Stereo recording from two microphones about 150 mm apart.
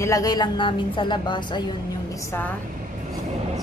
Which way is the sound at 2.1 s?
15° left (ahead or behind).